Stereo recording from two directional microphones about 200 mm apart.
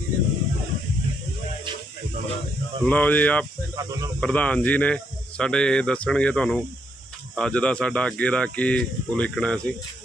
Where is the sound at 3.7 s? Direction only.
15° right (ahead or behind).